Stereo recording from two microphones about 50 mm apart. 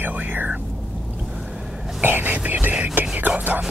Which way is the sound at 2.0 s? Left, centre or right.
Right.